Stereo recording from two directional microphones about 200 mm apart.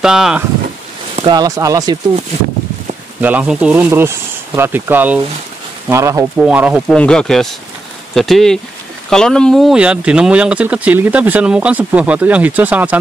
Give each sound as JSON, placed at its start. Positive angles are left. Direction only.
{"t": 0.0, "sound": "speech", "side_deg": -5}
{"t": 1.1, "sound": "speech", "side_deg": -25}
{"t": 3.2, "sound": "speech", "side_deg": -10}